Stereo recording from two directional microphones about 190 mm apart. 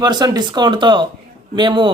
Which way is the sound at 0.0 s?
20° right (ahead or behind).